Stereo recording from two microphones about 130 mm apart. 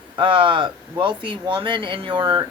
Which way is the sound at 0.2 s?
40° right (ahead or behind).